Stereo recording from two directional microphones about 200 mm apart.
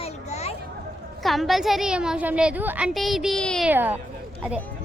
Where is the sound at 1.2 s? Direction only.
Centre (ahead or behind).